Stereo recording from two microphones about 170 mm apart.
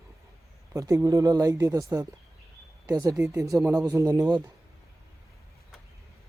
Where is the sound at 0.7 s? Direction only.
20° right (ahead or behind).